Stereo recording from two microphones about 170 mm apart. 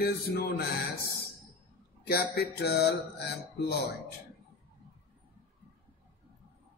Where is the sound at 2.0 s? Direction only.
70° left (ahead or behind).